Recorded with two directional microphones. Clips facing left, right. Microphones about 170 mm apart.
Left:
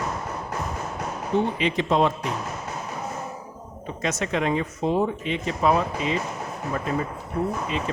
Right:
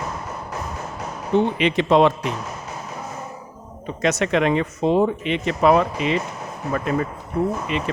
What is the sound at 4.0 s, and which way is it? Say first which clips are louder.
Speech: right 6 dB; 75° right (ahead or behind).